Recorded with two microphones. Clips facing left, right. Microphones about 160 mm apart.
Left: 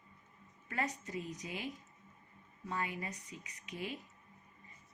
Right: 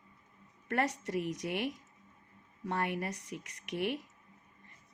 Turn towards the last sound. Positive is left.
turn(degrees=-75)  # may be behind; listen again after turning